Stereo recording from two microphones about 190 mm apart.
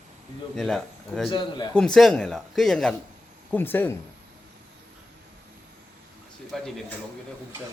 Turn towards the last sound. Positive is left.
turn(degrees=0)  # may be behind; listen again after turning